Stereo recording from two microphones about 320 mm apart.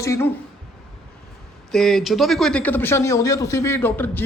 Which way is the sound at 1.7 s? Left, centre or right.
Centre.